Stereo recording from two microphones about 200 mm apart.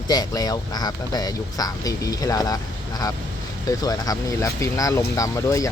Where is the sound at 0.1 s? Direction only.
20° left (ahead or behind).